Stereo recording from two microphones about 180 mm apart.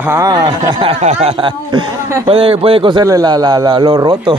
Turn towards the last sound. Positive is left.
turn(degrees=-25)  # may be behind; listen again after turning